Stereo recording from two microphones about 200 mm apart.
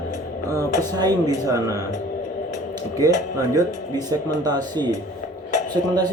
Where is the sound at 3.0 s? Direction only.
15° right (ahead or behind).